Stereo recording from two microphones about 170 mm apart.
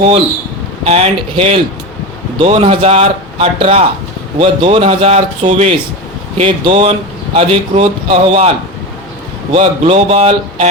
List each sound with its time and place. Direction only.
0.9 s speech: 35° right (ahead or behind)
9.5 s speech: 40° right (ahead or behind)